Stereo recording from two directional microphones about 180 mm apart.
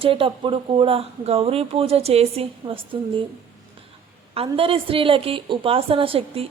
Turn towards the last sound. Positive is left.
turn(degrees=-30)  # may be behind; listen again after turning